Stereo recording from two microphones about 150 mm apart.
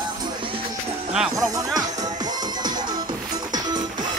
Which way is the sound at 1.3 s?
25° right (ahead or behind).